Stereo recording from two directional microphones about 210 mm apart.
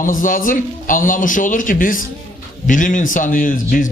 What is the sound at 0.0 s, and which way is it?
A man's voice, 40° left (ahead or behind).